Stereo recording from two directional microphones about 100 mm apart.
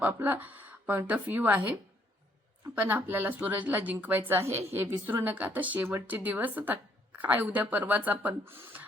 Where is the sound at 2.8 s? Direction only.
20° right (ahead or behind).